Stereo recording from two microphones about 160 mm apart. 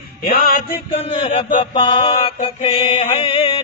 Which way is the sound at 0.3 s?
70° left (ahead or behind).